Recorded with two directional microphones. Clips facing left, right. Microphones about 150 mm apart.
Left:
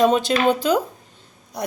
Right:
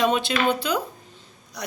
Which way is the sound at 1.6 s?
55° left (ahead or behind).